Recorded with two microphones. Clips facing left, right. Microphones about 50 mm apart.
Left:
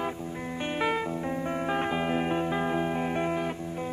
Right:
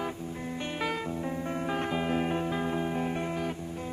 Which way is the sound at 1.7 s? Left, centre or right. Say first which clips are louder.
Left 1 dB; centre.